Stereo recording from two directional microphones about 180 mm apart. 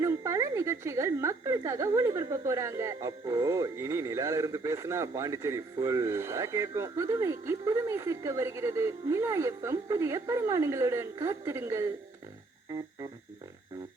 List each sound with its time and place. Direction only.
0.0 s a woman's voice: 15° right (ahead or behind)